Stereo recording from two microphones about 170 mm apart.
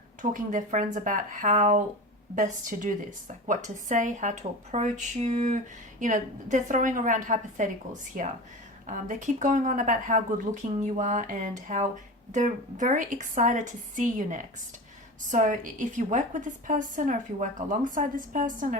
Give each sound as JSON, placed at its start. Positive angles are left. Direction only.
{"t": 0.2, "sound": "a woman's voice", "side_deg": -50}